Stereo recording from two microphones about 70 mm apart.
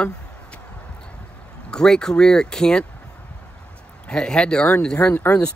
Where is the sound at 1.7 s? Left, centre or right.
Centre.